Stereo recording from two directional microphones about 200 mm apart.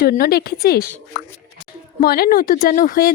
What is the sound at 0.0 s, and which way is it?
Speech, 50° left (ahead or behind).